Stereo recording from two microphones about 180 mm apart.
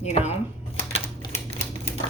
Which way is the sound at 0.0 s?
35° left (ahead or behind).